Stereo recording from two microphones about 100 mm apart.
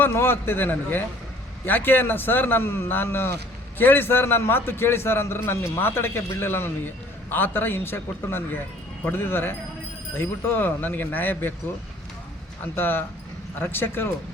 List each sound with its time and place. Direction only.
0.0 s a man's voice: 25° left (ahead or behind)
12.7 s a man's voice: 20° left (ahead or behind)